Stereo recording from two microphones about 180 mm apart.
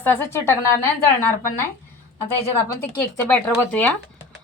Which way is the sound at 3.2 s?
10° left (ahead or behind).